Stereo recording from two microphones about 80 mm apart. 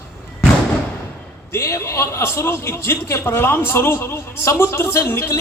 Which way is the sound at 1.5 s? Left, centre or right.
Left.